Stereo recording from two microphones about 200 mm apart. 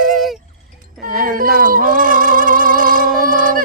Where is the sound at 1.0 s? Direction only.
45° right (ahead or behind).